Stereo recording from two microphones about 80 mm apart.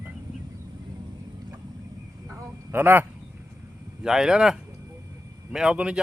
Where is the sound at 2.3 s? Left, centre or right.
Right.